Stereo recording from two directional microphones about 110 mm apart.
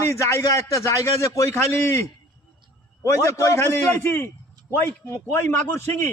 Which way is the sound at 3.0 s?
25° left (ahead or behind).